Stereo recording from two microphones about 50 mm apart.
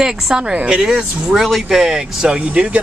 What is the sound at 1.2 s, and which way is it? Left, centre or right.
Speech, centre.